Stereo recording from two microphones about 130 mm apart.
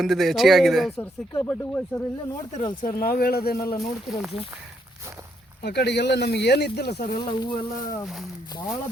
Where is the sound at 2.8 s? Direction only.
90° left.